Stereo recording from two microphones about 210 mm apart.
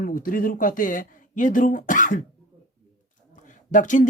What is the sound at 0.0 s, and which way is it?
Speech, 40° left (ahead or behind).